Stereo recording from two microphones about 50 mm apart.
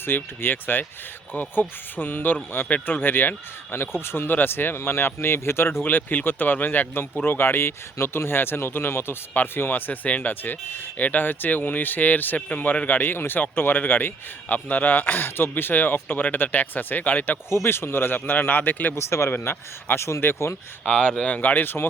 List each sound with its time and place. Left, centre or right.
0.0 s speech: left
3.0 s speech: left
9.3 s speech: left
17.5 s speech: left
18.9 s speech: left
20.8 s speech: centre
21.2 s speech: left